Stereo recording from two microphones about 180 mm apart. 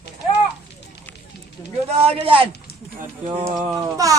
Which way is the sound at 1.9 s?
30° right (ahead or behind).